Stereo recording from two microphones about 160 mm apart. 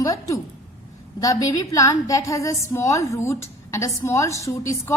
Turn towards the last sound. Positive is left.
turn(degrees=20)  # may be behind; listen again after turning